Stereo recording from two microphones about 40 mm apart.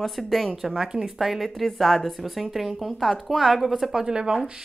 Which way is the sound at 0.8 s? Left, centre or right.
Centre.